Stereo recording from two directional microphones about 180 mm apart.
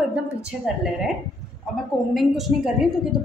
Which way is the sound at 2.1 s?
Centre (ahead or behind).